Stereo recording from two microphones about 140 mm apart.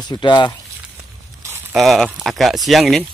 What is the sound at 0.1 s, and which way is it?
Speech, 30° left (ahead or behind).